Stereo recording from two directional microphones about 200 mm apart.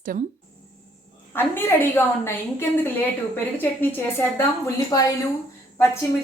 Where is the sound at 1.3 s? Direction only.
10° left (ahead or behind).